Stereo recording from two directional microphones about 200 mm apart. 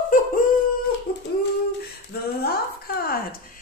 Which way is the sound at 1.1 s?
50° left (ahead or behind).